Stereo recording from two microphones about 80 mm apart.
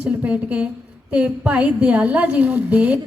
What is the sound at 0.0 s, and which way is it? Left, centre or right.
A woman's voice, centre.